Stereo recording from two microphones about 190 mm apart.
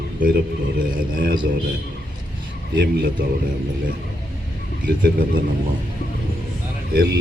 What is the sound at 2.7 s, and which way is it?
Speech, 55° right (ahead or behind).